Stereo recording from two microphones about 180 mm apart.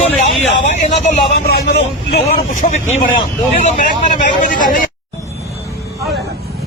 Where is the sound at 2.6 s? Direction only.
40° left (ahead or behind).